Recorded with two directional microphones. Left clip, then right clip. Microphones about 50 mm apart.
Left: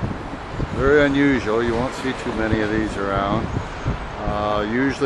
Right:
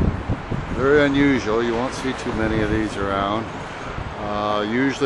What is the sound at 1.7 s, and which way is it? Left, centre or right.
Speech, right.